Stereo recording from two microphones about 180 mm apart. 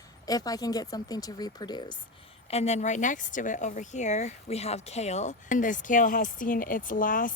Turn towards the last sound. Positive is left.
turn(degrees=50)  # may be behind; listen again after turning